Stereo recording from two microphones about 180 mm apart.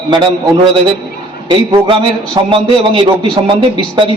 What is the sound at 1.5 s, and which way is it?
A man's voice, 25° right (ahead or behind).